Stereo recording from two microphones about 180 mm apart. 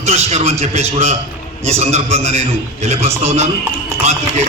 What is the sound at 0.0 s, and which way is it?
A man's voice, 35° right (ahead or behind).